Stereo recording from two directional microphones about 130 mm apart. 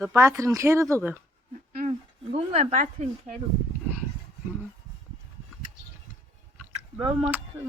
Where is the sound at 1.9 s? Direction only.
55° right (ahead or behind); by 3.3 s 75° right (ahead or behind).